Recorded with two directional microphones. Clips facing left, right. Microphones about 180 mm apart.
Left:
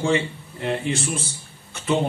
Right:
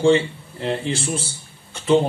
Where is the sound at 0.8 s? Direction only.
30° right (ahead or behind).